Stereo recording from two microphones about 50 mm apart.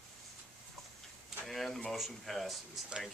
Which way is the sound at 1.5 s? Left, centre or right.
Centre.